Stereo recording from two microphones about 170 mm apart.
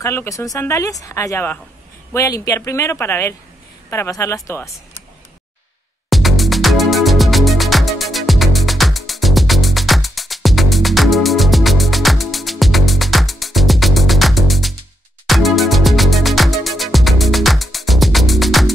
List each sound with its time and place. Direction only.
0.0 s speech: 15° left (ahead or behind)
6.0 s music: centre (ahead or behind)